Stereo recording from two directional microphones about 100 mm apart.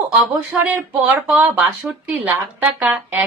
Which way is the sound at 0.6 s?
15° right (ahead or behind).